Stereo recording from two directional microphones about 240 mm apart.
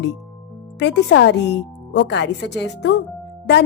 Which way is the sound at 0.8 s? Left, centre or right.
Left.